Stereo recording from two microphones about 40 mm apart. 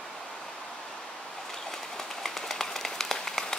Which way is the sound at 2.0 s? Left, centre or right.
Centre.